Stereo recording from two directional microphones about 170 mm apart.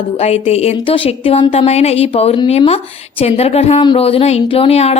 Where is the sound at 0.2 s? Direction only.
40° left (ahead or behind).